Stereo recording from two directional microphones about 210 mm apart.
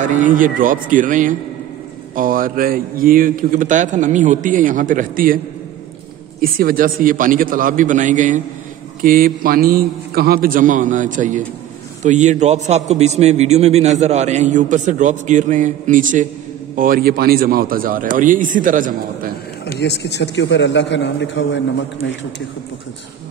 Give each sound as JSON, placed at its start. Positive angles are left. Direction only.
{"t": 0.0, "sound": "a man's voice", "side_deg": -35}
{"t": 6.4, "sound": "a man's voice", "side_deg": -45}
{"t": 19.6, "sound": "a man's voice", "side_deg": 55}